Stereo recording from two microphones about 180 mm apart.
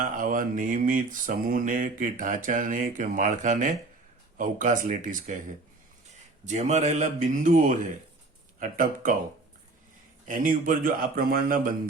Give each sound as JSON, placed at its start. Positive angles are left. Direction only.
{"t": 0.0, "sound": "mantra", "side_deg": -50}
{"t": 6.4, "sound": "a man's voice", "side_deg": -40}
{"t": 8.5, "sound": "mantra", "side_deg": -50}
{"t": 10.2, "sound": "mantra", "side_deg": -50}